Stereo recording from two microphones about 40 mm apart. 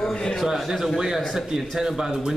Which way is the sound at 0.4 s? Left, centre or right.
Centre.